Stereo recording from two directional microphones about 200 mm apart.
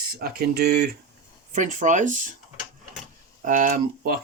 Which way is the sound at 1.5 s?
40° right (ahead or behind).